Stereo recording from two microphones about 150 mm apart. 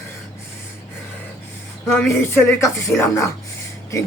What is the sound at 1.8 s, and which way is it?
Speech, 15° left (ahead or behind).